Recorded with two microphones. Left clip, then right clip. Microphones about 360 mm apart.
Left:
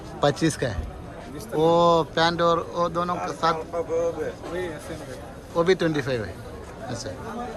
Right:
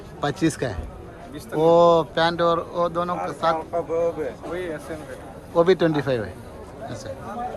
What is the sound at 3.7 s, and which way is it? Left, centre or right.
Speech, centre.